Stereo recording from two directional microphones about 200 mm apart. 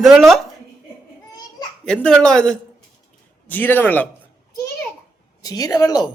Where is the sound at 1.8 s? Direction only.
5° left (ahead or behind).